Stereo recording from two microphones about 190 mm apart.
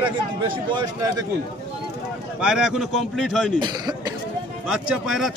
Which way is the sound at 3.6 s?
20° right (ahead or behind).